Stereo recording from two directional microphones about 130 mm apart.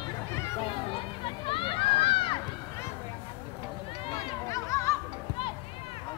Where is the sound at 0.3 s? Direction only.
20° left (ahead or behind).